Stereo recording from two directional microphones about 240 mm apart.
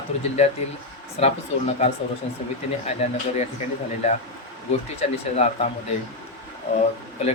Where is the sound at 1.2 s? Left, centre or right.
Left.